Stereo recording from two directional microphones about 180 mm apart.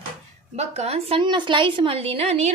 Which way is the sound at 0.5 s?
35° right (ahead or behind).